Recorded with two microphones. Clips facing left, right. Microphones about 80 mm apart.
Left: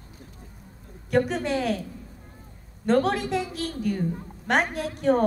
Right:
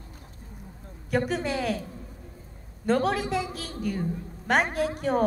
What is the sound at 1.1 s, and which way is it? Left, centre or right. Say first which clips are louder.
Speech: left 3 dB; centre.